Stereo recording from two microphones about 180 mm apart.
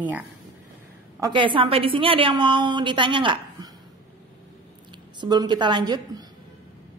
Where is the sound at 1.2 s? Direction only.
25° right (ahead or behind).